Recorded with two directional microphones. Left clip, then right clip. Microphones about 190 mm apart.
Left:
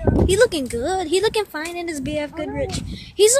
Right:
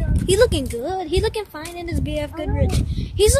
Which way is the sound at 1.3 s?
25° left (ahead or behind).